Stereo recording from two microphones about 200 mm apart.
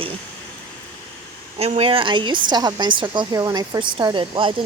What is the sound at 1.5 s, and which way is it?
A woman's voice, 30° right (ahead or behind).